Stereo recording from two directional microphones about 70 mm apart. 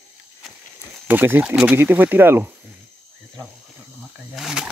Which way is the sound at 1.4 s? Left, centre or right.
Centre.